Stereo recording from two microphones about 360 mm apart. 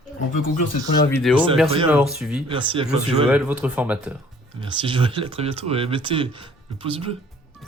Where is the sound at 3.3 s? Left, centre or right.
Centre.